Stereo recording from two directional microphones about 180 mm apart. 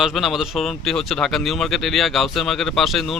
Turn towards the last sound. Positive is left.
turn(degrees=0)  # may be behind; listen again after turning